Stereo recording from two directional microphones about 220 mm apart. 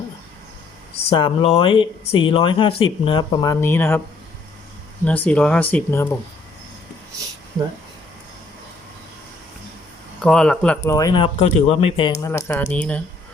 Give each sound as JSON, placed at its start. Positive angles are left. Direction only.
{"t": 1.1, "sound": "speech", "side_deg": 25}
{"t": 5.0, "sound": "speech", "side_deg": 5}
{"t": 10.2, "sound": "speech", "side_deg": 0}
{"t": 10.8, "sound": "speech", "side_deg": 15}